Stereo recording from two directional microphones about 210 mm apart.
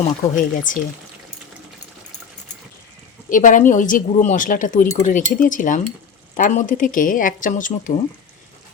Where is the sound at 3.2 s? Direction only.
40° left (ahead or behind).